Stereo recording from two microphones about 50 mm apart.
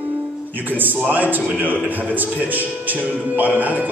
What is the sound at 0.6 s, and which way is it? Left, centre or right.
Speech, right.